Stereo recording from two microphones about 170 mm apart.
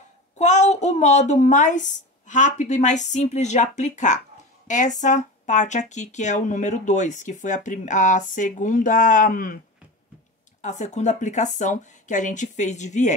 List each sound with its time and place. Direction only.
0.4 s speech: 45° left (ahead or behind)
10.6 s speech: 45° left (ahead or behind)